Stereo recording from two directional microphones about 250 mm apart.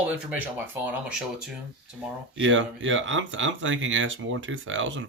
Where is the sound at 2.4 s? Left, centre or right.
Right.